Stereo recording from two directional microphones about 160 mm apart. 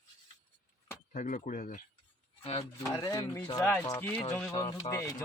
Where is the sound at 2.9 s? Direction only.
20° left (ahead or behind).